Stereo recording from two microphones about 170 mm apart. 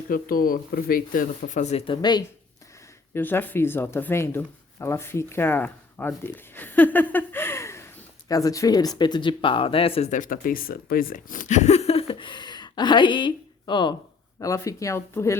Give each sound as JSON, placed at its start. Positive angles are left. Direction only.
{"t": 0.1, "sound": "speech", "side_deg": 55}
{"t": 1.9, "sound": "speech", "side_deg": 25}
{"t": 3.2, "sound": "speech", "side_deg": 10}
{"t": 10.1, "sound": "speech", "side_deg": 50}